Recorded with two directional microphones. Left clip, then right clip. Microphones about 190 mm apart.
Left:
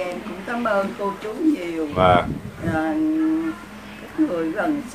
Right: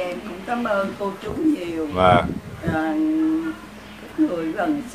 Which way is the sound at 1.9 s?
5° right (ahead or behind).